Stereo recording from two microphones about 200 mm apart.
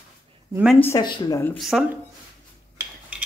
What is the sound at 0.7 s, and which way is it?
Speech, 10° left (ahead or behind).